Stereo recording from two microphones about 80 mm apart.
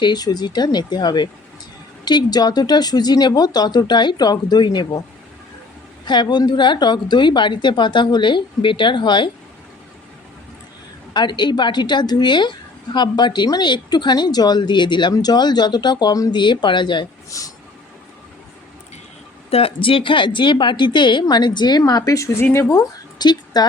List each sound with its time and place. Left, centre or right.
0.0 s speech: left
6.1 s a woman's voice: left
11.1 s a woman's voice: left
15.1 s speech: left
16.3 s a woman's voice: left
17.2 s speech: left
19.8 s a woman's voice: left
22.7 s speech: left